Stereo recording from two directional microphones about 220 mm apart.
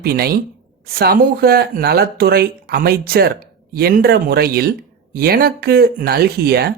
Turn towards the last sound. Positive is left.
turn(degrees=-45)  # may be behind; listen again after turning